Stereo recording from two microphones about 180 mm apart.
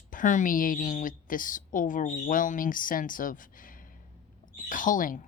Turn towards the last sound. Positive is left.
turn(degrees=50)  # may be behind; listen again after turning